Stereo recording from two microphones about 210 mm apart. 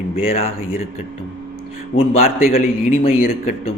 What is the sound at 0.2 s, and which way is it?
Speech, 25° left (ahead or behind).